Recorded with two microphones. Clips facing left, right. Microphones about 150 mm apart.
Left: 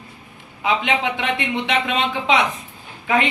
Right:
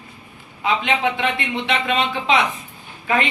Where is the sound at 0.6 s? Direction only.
15° left (ahead or behind).